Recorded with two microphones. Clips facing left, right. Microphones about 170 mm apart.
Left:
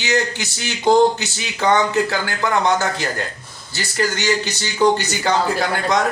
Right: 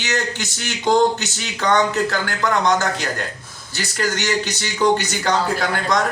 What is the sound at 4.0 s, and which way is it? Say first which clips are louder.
Speech: left 2 dB; 10° left (ahead or behind).